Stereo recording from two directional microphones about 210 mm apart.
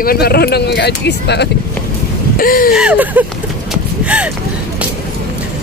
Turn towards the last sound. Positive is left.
turn(degrees=-5)  # may be behind; listen again after turning